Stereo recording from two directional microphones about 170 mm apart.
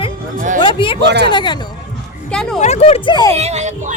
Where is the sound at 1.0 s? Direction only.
80° right.